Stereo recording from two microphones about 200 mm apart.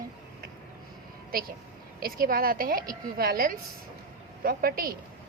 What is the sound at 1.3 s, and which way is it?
A woman's voice, 45° right (ahead or behind).